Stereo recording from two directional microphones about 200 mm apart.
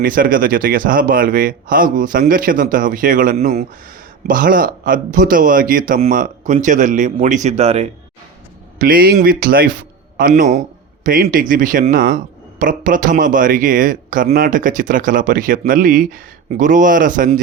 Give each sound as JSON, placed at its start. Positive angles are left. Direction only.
{"t": 0.0, "sound": "speech", "side_deg": -45}
{"t": 8.8, "sound": "speech", "side_deg": -45}